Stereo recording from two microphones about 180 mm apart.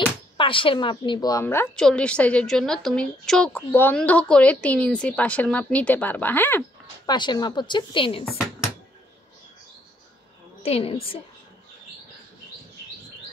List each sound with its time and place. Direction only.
0.4 s a woman's voice: 30° left (ahead or behind); by 6.6 s 10° left (ahead or behind)
7.1 s a woman's voice: 25° left (ahead or behind)
10.6 s a woman's voice: 35° left (ahead or behind)